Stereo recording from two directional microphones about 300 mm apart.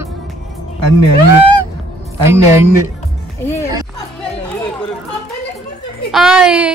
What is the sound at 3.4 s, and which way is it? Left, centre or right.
Music, centre.